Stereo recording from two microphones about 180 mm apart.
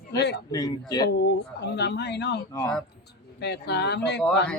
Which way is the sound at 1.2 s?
70° left (ahead or behind).